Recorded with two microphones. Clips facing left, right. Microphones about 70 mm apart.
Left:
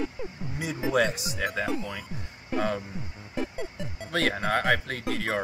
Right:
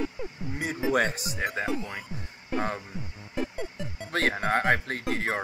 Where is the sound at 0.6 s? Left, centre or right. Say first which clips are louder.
Even; right.